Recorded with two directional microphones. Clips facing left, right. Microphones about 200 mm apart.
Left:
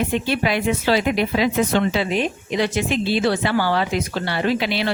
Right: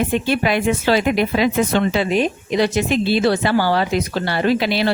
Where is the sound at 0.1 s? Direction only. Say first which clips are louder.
Right 3 dB; 50° right (ahead or behind).